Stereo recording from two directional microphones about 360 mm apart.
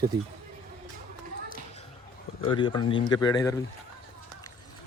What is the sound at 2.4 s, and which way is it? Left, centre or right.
Speech, centre.